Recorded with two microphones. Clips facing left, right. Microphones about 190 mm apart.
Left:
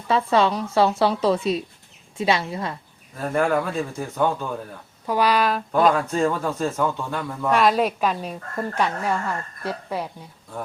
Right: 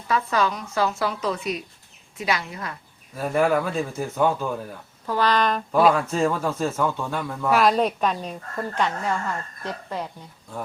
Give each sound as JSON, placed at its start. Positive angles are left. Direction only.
{"t": 0.1, "sound": "a woman's voice", "side_deg": 30}
{"t": 3.2, "sound": "speech", "side_deg": -5}
{"t": 5.0, "sound": "speech", "side_deg": 10}